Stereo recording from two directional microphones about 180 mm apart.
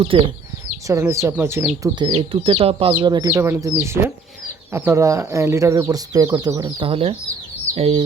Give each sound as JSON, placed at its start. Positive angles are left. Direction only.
{"t": 0.1, "sound": "speech", "side_deg": -30}
{"t": 0.9, "sound": "speech", "side_deg": -15}
{"t": 3.2, "sound": "speech", "side_deg": -15}
{"t": 6.8, "sound": "speech", "side_deg": -30}